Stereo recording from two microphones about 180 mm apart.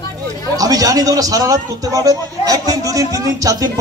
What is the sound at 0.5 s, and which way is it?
A man's voice, 20° right (ahead or behind).